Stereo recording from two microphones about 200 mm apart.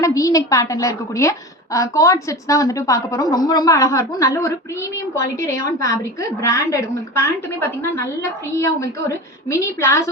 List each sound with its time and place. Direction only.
0.0 s a woman's voice: 15° left (ahead or behind)